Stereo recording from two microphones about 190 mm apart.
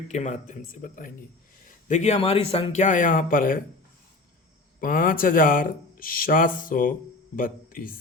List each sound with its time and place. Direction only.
0.1 s speech: 40° left (ahead or behind)
4.8 s speech: 45° left (ahead or behind)